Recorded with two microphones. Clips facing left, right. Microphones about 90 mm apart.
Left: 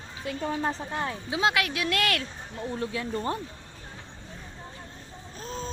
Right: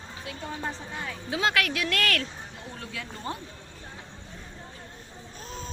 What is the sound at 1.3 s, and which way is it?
Speech, 20° left (ahead or behind).